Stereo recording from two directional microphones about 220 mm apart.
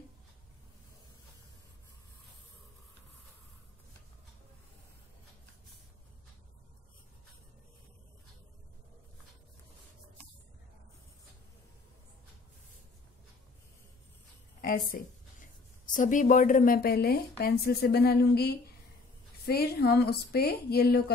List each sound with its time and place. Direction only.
14.6 s a woman's voice: 40° left (ahead or behind)